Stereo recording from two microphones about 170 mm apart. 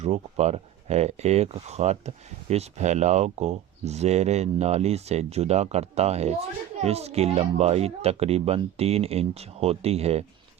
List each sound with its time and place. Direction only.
0.0 s speech: 40° right (ahead or behind)